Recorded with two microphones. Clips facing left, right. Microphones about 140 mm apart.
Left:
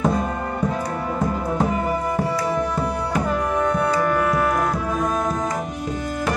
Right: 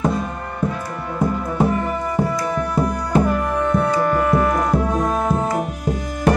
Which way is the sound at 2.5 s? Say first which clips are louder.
Right 2 dB; centre (ahead or behind).